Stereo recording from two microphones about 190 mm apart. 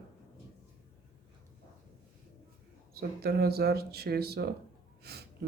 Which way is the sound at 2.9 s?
55° right (ahead or behind).